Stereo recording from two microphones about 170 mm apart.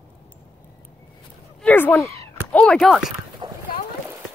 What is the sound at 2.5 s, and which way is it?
Speech, 5° left (ahead or behind).